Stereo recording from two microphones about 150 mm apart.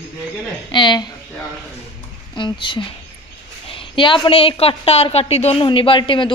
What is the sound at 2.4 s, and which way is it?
A woman's voice, 35° left (ahead or behind).